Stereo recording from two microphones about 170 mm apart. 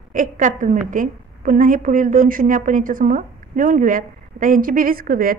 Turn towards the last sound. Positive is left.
turn(degrees=-55)  # may be behind; listen again after turning